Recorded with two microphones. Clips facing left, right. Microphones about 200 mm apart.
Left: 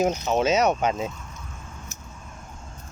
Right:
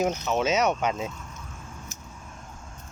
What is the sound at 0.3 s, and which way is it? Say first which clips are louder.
Speech: left 3 dB; 35° left (ahead or behind).